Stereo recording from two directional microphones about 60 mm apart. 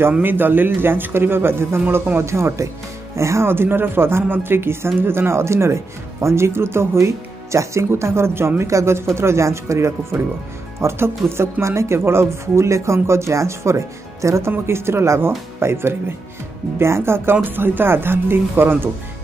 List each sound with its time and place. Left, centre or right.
0.2 s speech: right